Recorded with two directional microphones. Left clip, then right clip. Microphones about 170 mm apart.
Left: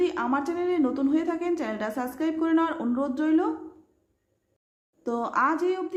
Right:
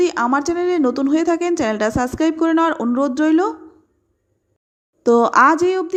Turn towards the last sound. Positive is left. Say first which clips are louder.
# right 11 dB
turn(degrees=-40)  # may be behind; listen again after turning